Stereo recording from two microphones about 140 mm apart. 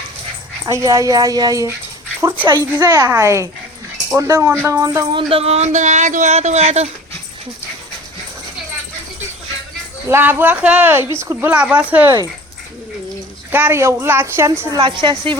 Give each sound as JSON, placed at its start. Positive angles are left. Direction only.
{"t": 0.6, "sound": "speech", "side_deg": -20}
{"t": 2.2, "sound": "speech", "side_deg": -15}
{"t": 2.7, "sound": "speech", "side_deg": -25}
{"t": 5.1, "sound": "speech", "side_deg": -45}
{"t": 10.1, "sound": "a woman's voice", "side_deg": -15}
{"t": 13.5, "sound": "a woman's voice", "side_deg": -15}
{"t": 14.8, "sound": "a woman's voice", "side_deg": -35}